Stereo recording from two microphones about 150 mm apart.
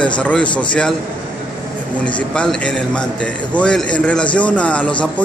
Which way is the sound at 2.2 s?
5° left (ahead or behind).